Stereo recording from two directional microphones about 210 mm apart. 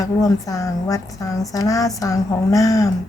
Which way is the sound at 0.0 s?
15° left (ahead or behind).